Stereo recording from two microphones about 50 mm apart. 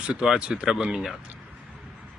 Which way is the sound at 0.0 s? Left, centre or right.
Centre.